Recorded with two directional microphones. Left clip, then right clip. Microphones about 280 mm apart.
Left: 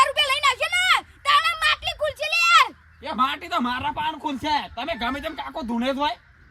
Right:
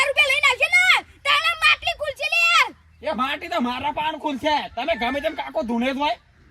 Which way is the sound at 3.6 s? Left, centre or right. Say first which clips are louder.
Right 1 dB; centre.